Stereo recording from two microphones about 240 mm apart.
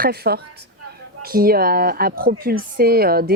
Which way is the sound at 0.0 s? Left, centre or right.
Right.